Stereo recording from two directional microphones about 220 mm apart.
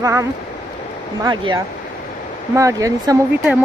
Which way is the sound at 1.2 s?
20° right (ahead or behind).